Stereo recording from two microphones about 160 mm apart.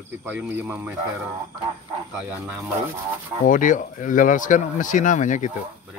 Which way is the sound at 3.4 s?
55° left (ahead or behind).